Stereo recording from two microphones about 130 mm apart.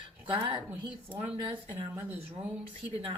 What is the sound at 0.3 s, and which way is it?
Speech, 45° right (ahead or behind).